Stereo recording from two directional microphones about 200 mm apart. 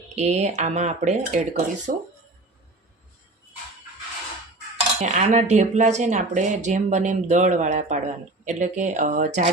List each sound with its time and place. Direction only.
0.2 s speech: 35° right (ahead or behind)
5.0 s speech: 35° right (ahead or behind)